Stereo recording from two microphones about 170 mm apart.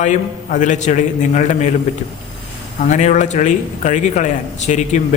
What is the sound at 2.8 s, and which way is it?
Speech, 45° left (ahead or behind).